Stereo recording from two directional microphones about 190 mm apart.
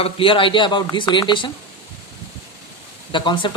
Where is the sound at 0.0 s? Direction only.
30° left (ahead or behind).